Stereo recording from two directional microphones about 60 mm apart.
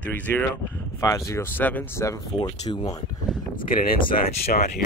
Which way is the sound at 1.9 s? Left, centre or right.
Left.